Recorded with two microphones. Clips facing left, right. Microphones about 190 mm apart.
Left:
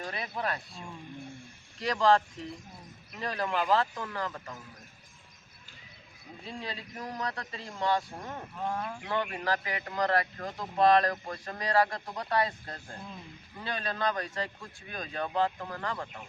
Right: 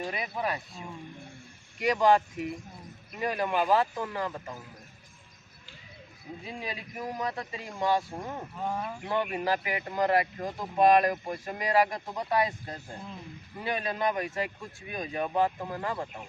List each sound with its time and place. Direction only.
0.0 s speech: 15° right (ahead or behind)
6.4 s speech: 15° right (ahead or behind)